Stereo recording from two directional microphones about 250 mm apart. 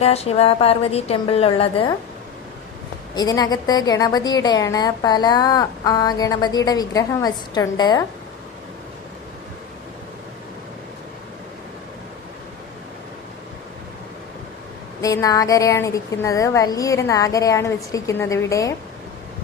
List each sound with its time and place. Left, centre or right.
0.0 s a woman's voice: left
3.2 s a woman's voice: centre
15.0 s a woman's voice: centre